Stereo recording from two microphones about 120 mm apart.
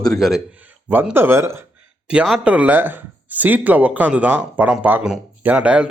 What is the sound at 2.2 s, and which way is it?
A man's voice, 5° right (ahead or behind).